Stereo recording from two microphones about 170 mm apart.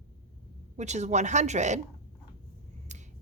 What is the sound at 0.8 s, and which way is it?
A woman's voice, 45° right (ahead or behind).